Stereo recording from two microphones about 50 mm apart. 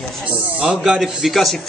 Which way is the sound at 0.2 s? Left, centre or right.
Right.